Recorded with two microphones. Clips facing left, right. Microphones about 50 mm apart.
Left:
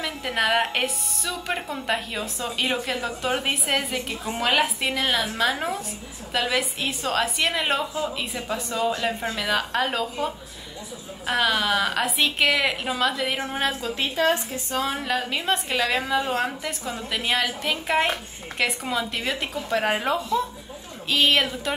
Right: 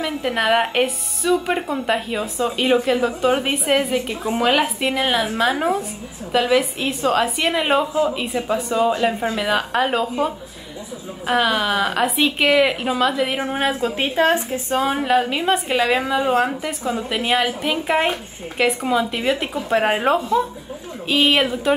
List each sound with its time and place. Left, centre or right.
0.0 s a woman's voice: centre
4.5 s a woman's voice: centre
13.7 s a woman's voice: right; by 19.6 s centre
19.7 s speech: right
21.1 s a woman's voice: centre